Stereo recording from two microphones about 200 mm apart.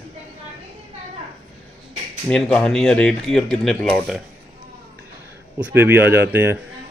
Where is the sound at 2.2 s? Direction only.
5° left (ahead or behind).